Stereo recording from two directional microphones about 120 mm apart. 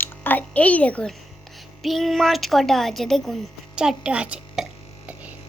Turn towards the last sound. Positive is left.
turn(degrees=-10)  # may be behind; listen again after turning